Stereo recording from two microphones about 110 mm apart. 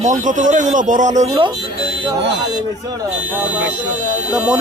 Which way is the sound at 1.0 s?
90° right.